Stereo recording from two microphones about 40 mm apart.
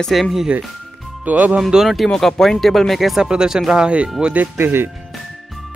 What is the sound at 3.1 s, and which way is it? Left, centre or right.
Speech, centre.